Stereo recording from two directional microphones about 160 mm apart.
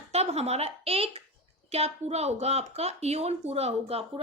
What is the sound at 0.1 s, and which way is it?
A woman's voice, 40° right (ahead or behind).